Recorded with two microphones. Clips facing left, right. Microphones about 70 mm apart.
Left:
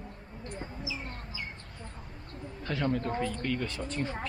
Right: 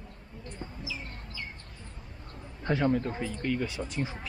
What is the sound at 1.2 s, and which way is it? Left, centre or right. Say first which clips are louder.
Bird: left 1 dB; centre.